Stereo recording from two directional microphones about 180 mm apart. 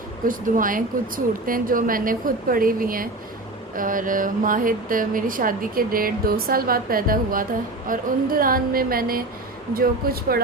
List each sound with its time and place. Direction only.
0.3 s speech: 50° right (ahead or behind)